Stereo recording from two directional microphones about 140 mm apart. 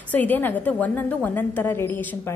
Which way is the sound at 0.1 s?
10° left (ahead or behind).